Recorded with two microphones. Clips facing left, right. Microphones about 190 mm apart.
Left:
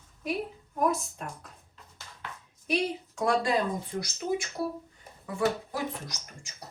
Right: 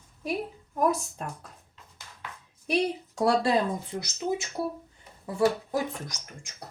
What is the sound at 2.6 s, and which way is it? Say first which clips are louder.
Speech: right 2 dB; 35° right (ahead or behind).